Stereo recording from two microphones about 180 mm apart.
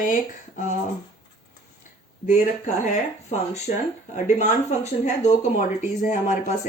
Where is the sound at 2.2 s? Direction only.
45° left (ahead or behind).